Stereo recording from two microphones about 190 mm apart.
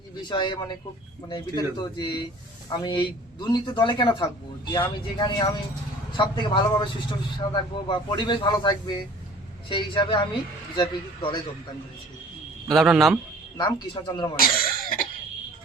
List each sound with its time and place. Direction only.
0.2 s a man's voice: 25° left (ahead or behind)
12.7 s a man's voice: centre (ahead or behind)
13.6 s a man's voice: 20° left (ahead or behind)
14.3 s cough: 50° left (ahead or behind)